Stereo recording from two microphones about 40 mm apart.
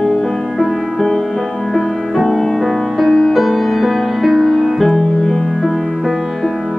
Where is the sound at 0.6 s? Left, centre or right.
Centre.